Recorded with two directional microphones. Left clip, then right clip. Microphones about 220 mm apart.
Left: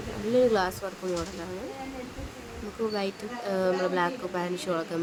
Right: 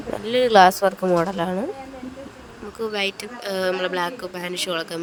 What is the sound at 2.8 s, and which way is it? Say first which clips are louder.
A woman's voice: right 6 dB; 40° right (ahead or behind).